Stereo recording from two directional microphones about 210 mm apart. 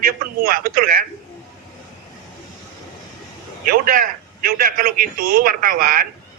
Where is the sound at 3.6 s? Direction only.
45° right (ahead or behind).